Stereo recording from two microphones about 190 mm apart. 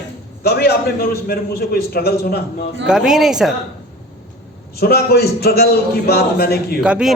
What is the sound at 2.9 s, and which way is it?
Speech, 5° right (ahead or behind).